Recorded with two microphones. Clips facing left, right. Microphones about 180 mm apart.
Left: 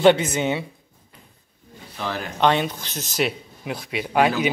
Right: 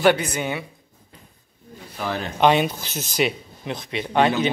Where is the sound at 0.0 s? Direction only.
25° left (ahead or behind).